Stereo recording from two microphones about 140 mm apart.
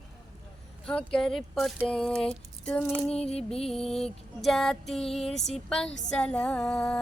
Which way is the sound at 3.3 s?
45° left (ahead or behind).